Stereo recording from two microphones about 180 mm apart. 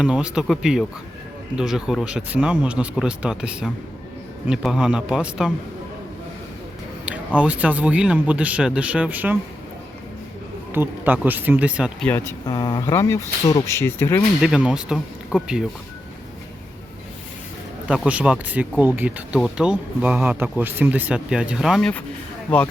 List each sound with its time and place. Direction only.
0.0 s speech: 5° right (ahead or behind)
7.3 s speech: 10° right (ahead or behind)
10.7 s speech: 10° right (ahead or behind)
12.0 s speech: 10° left (ahead or behind)
12.5 s speech: 25° left (ahead or behind)
14.4 s speech: 5° right (ahead or behind)
17.8 s speech: 5° right (ahead or behind)